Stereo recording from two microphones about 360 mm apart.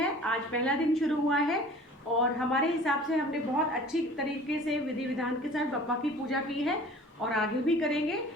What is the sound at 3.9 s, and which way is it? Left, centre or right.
Speech, centre.